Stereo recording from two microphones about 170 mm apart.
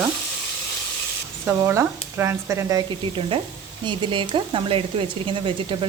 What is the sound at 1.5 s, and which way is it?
Frying, 15° right (ahead or behind).